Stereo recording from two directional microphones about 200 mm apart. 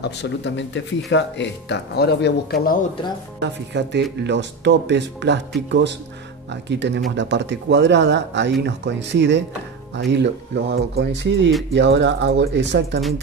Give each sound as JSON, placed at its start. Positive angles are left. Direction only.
{"t": 0.0, "sound": "speech", "side_deg": 60}
{"t": 3.3, "sound": "speech", "side_deg": -60}